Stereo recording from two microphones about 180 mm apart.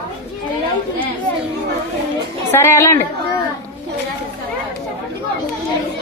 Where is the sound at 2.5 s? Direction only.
15° left (ahead or behind).